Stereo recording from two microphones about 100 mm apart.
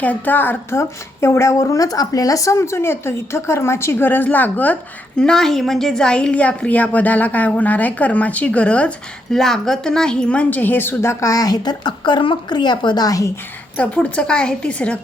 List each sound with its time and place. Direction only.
0.0 s a woman's voice: 15° left (ahead or behind); by 13.3 s 35° left (ahead or behind)
13.7 s a woman's voice: 10° left (ahead or behind)